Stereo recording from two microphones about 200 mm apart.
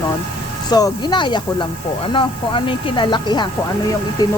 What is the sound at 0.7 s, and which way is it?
Speech, 20° left (ahead or behind).